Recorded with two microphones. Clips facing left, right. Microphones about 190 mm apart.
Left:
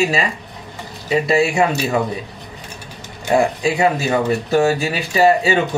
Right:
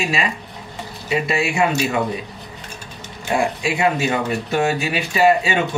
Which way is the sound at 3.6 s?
35° left (ahead or behind).